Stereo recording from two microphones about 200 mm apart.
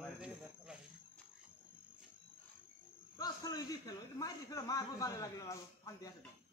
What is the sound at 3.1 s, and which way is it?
A man's voice, 20° left (ahead or behind).